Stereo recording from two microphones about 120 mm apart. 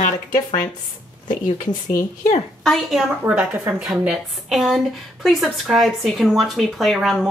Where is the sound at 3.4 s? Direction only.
5° right (ahead or behind).